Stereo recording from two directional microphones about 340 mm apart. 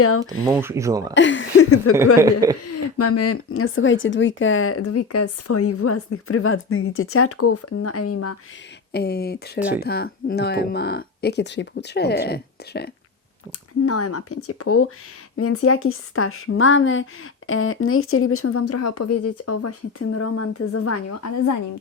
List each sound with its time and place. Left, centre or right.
0.4 s speech: centre
1.1 s speech: left
2.1 s speech: centre
2.6 s speech: left
8.9 s speech: left
9.6 s speech: centre
9.8 s speech: left
13.8 s speech: left